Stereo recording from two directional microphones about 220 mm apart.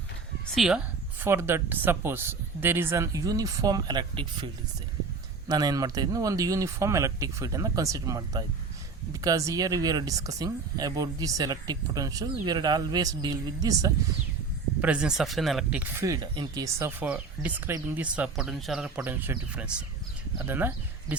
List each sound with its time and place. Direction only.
0.5 s speech: centre (ahead or behind); by 4.4 s 20° right (ahead or behind)
5.5 s speech: 15° right (ahead or behind)
14.8 s speech: 5° right (ahead or behind)